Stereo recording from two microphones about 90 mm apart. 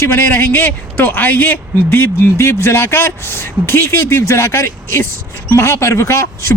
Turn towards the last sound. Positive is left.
turn(degrees=30)  # may be behind; listen again after turning